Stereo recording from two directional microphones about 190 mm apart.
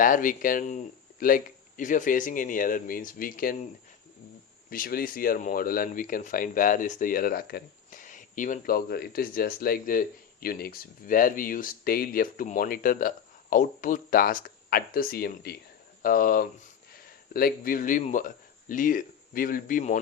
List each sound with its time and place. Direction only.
0.0 s speech: 45° left (ahead or behind)
4.7 s speech: 50° left (ahead or behind)